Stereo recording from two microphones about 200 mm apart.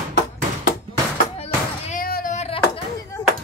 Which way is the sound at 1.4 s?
40° left (ahead or behind).